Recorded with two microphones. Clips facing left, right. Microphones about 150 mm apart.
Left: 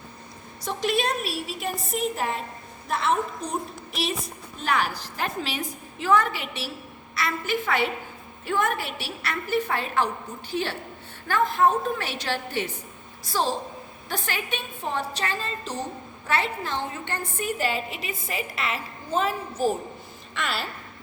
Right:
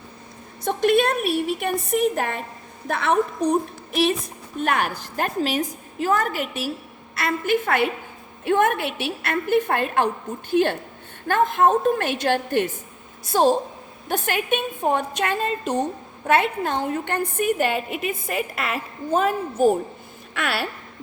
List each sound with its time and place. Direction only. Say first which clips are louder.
0.6 s a woman's voice: right 7 dB; 55° right (ahead or behind)
4.6 s a woman's voice: right 3 dB; 55° right (ahead or behind)
20.3 s a woman's voice: right 4 dB; 65° right (ahead or behind)